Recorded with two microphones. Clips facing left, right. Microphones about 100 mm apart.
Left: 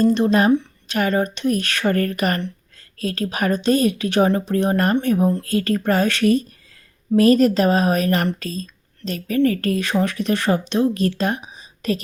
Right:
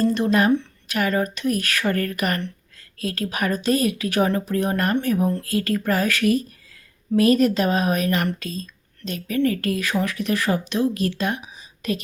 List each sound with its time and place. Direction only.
0.0 s a woman's voice: 25° left (ahead or behind)